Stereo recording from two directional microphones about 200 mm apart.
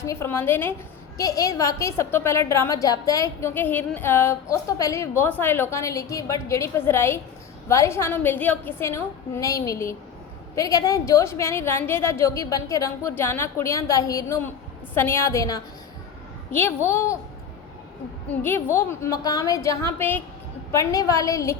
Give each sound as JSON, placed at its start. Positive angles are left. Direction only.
{"t": 0.0, "sound": "a woman's voice", "side_deg": 15}
{"t": 18.3, "sound": "a woman's voice", "side_deg": 10}